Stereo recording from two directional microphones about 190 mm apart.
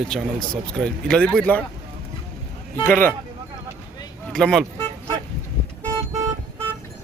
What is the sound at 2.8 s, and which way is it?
Speech, 10° left (ahead or behind).